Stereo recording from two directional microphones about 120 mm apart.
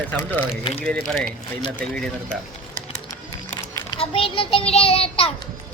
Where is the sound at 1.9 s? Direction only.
5° left (ahead or behind).